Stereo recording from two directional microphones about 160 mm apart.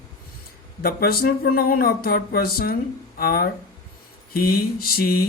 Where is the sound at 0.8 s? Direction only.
70° left (ahead or behind).